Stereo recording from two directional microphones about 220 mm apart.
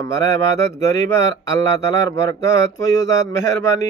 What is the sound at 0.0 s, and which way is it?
Speech, 15° left (ahead or behind).